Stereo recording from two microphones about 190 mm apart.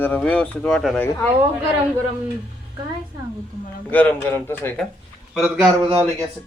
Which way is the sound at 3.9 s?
10° left (ahead or behind).